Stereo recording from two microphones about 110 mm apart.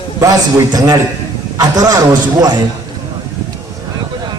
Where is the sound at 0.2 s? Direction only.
35° right (ahead or behind).